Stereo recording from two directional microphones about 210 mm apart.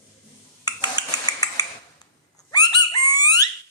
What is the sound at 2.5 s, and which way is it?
Bird, 20° left (ahead or behind).